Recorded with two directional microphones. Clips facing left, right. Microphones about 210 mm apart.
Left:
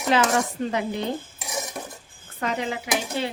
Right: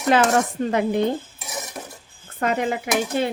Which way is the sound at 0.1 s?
55° right (ahead or behind).